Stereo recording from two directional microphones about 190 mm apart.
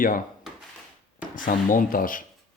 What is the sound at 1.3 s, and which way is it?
Speech, 45° left (ahead or behind).